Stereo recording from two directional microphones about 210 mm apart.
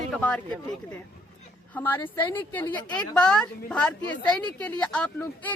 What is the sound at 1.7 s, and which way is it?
Speech, 10° left (ahead or behind).